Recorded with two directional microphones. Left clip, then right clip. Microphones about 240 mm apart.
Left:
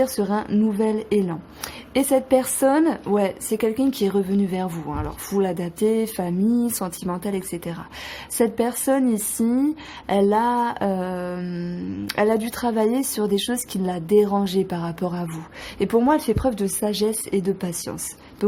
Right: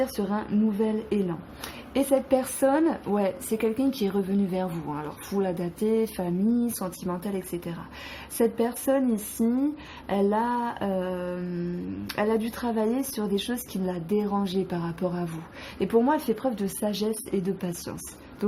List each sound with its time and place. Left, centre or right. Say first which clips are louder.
0.0 s a woman's voice: left 6 dB; left